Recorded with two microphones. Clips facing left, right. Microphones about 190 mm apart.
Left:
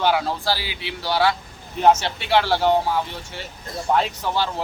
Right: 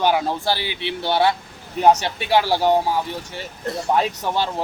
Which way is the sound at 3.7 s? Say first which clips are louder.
Right 7 dB; 70° right (ahead or behind).